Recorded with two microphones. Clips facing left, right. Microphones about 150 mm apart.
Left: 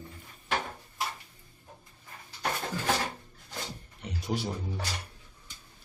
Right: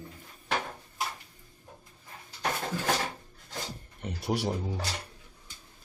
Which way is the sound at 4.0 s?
60° right (ahead or behind).